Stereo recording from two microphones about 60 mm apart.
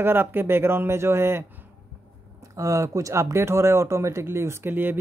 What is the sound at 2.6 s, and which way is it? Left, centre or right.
Speech, right.